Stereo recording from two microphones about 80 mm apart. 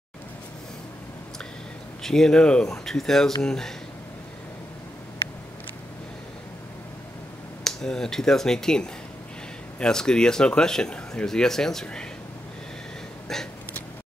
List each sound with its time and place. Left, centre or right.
2.0 s speech: centre
7.6 s speech: centre
13.3 s speech: centre